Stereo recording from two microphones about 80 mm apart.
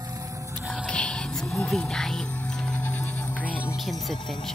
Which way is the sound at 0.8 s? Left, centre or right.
Centre.